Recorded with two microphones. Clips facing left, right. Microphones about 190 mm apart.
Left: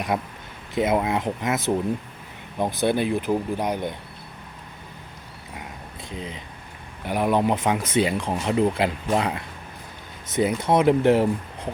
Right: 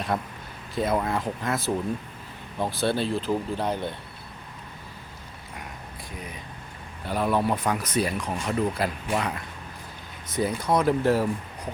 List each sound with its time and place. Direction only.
0.1 s speech: 15° left (ahead or behind)
6.1 s speech: 25° left (ahead or behind)